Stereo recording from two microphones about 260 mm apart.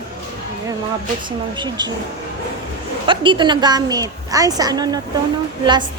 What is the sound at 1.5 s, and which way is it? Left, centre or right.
Speech, centre.